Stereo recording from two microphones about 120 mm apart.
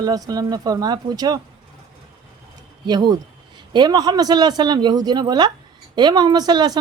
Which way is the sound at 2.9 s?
35° right (ahead or behind).